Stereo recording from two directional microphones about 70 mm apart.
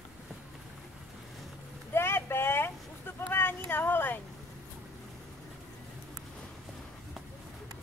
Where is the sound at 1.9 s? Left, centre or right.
Left.